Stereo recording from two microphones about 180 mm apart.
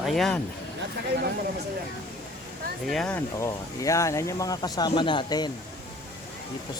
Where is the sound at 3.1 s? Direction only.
15° left (ahead or behind).